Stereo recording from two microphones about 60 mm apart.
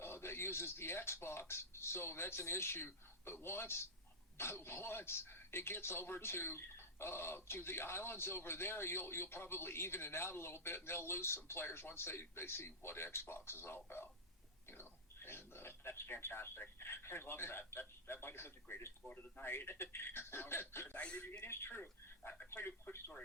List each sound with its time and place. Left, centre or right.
0.0 s a man's voice: left
19.0 s a man's voice: left
20.9 s speech: left
21.4 s a man's voice: left